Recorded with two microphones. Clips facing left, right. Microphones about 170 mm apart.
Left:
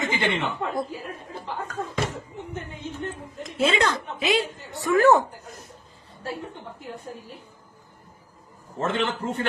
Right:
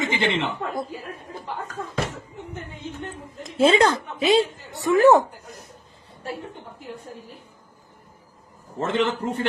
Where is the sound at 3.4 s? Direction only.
30° right (ahead or behind).